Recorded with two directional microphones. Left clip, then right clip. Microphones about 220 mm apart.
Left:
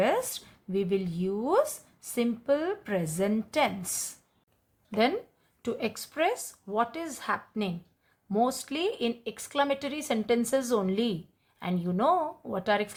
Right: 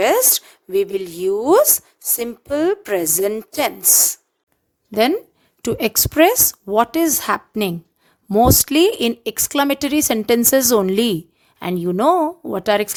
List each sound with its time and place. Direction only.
0.0 s a woman's voice: 50° right (ahead or behind)
5.6 s a woman's voice: 55° right (ahead or behind)